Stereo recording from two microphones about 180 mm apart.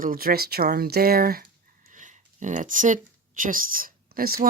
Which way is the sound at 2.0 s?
45° right (ahead or behind).